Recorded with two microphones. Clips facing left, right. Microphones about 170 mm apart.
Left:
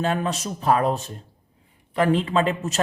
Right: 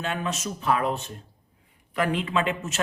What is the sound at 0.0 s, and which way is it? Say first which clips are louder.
A man's voice: left 5 dB; 35° left (ahead or behind).